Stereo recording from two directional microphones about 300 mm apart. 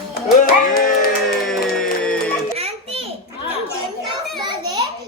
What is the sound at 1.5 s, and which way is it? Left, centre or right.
Music, centre.